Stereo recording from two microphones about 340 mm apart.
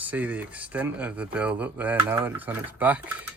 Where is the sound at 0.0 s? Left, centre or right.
Centre.